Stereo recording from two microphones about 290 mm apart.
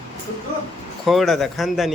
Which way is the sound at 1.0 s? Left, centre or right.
Centre.